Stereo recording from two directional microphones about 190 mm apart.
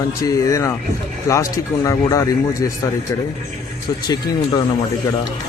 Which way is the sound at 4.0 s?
20° left (ahead or behind).